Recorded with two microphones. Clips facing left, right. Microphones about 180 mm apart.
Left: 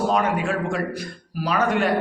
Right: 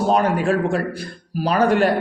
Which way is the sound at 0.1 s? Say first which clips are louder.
Right 4 dB; 35° right (ahead or behind).